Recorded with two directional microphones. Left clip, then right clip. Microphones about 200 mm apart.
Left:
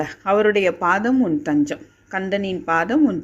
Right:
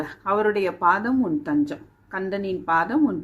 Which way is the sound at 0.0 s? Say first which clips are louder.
Left 5 dB; 20° left (ahead or behind).